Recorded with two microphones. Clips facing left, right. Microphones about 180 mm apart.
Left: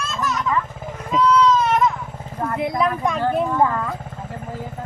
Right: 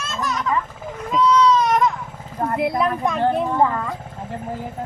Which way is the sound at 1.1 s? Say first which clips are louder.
Even; 5° left (ahead or behind).